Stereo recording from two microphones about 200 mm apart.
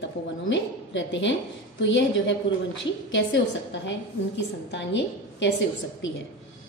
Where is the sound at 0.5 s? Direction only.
65° left (ahead or behind).